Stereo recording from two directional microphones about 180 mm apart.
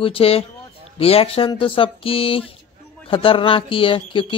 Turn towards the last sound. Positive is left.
turn(degrees=30)  # may be behind; listen again after turning